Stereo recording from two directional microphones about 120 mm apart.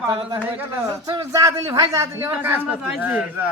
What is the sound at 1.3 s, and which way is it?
A man's voice, 30° right (ahead or behind).